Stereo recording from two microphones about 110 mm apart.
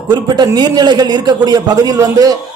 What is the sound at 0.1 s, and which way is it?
A man's voice, 40° right (ahead or behind).